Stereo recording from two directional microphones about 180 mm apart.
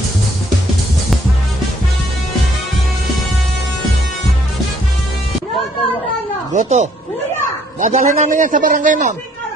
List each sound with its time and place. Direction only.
6.5 s a man's voice: 40° right (ahead or behind)